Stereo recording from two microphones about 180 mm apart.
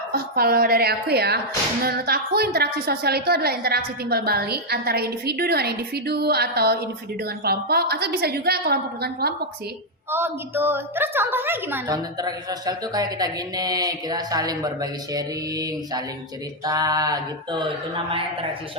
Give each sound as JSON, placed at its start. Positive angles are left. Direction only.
{"t": 0.1, "sound": "a woman's voice", "side_deg": -55}
{"t": 10.1, "sound": "a woman's voice", "side_deg": -15}